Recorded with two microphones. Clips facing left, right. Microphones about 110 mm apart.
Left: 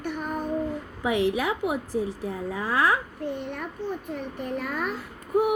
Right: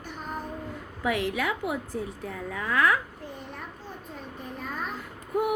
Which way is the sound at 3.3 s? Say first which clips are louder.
Left 8 dB; 70° left (ahead or behind).